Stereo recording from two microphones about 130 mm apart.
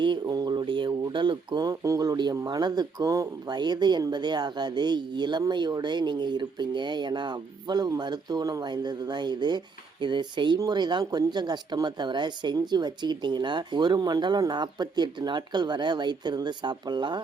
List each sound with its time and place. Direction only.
0.0 s speech: 35° right (ahead or behind)